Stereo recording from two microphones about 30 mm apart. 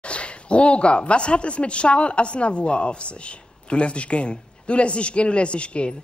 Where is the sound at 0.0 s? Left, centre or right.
Left.